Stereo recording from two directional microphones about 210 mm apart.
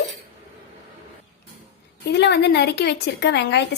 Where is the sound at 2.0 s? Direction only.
50° left (ahead or behind).